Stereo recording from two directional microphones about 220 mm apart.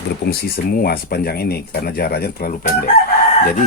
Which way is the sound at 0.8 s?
45° left (ahead or behind).